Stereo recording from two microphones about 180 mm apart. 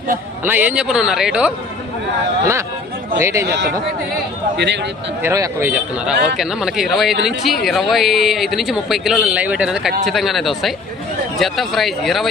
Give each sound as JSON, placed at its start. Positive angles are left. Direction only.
{"t": 0.4, "sound": "speech", "side_deg": -10}
{"t": 3.2, "sound": "a man's voice", "side_deg": -15}
{"t": 3.4, "sound": "speech", "side_deg": -70}
{"t": 5.2, "sound": "a man's voice", "side_deg": -15}